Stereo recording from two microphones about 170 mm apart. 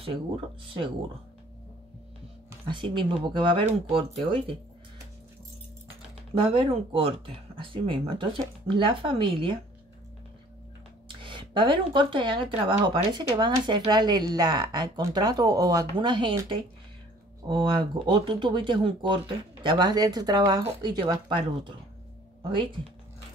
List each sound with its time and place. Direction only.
2.7 s speech: 30° right (ahead or behind)
6.3 s speech: 30° right (ahead or behind)
11.2 s speech: 30° right (ahead or behind)